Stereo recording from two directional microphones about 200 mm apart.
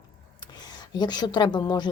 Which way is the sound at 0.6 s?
20° left (ahead or behind).